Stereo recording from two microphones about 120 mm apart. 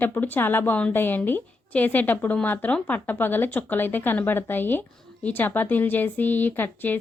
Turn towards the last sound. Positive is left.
turn(degrees=15)  # may be behind; listen again after turning